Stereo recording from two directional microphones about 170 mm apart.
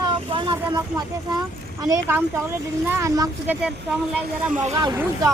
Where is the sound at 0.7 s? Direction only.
25° right (ahead or behind); by 4.6 s 5° right (ahead or behind).